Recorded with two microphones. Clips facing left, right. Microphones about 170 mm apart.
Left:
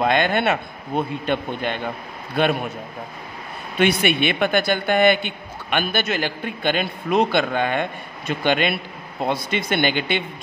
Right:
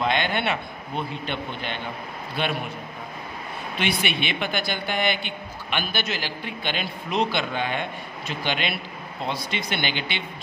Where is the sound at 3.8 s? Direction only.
50° left (ahead or behind).